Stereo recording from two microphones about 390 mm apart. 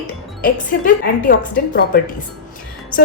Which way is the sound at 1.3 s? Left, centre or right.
Left.